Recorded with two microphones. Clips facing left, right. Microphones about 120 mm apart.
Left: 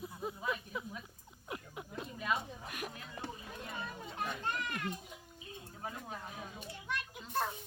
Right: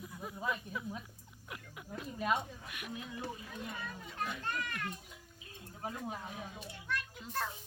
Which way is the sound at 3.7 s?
30° left (ahead or behind).